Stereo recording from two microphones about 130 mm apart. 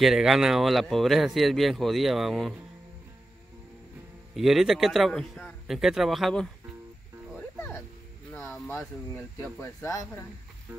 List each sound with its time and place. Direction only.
0.0 s a man's voice: 5° right (ahead or behind)
4.4 s a man's voice: centre (ahead or behind)
7.3 s music: 15° left (ahead or behind)
8.3 s a sound: 5° left (ahead or behind)
9.6 s speech: 25° left (ahead or behind)